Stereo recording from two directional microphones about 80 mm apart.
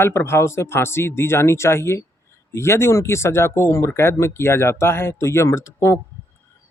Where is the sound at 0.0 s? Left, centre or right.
Left.